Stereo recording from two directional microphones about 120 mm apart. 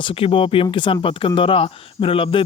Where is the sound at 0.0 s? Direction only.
50° left (ahead or behind).